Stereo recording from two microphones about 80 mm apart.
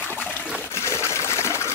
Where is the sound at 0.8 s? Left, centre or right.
Left.